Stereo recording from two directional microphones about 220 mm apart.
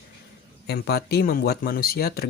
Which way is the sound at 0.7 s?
45° left (ahead or behind).